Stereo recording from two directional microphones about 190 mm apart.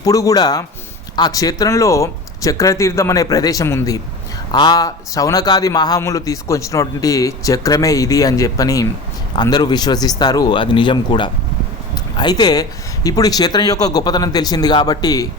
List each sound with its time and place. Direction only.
0.0 s speech: 20° left (ahead or behind)